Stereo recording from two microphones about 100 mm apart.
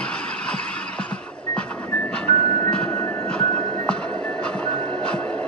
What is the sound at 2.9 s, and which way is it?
Music, 35° left (ahead or behind).